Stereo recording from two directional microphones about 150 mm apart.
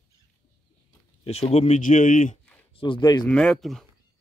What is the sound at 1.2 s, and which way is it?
Speech, 45° left (ahead or behind).